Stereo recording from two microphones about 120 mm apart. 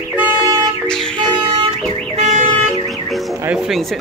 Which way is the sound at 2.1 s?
70° right (ahead or behind).